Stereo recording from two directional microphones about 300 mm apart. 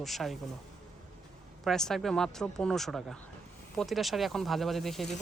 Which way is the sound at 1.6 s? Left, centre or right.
Centre.